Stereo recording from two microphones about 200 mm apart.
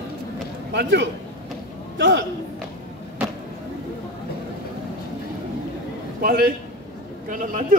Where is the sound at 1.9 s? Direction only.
60° right (ahead or behind).